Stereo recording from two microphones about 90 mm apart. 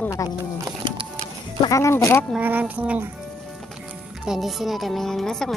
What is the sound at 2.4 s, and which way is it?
Speech, 20° right (ahead or behind).